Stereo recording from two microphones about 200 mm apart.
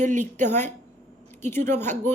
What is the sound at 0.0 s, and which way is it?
Speech, 35° right (ahead or behind).